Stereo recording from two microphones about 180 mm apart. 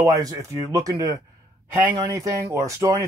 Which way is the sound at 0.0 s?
20° right (ahead or behind).